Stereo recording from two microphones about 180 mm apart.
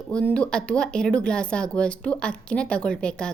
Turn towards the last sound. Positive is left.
turn(degrees=5)  # may be behind; listen again after turning